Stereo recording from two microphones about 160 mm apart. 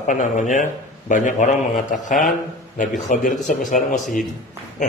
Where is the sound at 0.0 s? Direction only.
50° left (ahead or behind).